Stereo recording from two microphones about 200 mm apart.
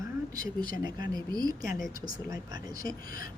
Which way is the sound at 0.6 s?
20° right (ahead or behind).